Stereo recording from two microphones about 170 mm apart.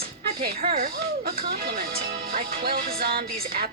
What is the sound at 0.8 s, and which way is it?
Speech, 70° right (ahead or behind).